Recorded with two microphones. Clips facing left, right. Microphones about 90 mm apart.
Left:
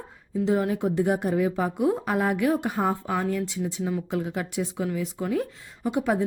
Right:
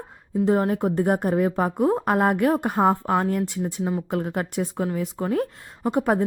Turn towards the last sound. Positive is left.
turn(degrees=-45)  # may be behind; listen again after turning